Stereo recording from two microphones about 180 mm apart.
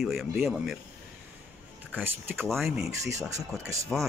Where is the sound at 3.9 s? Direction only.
5° right (ahead or behind).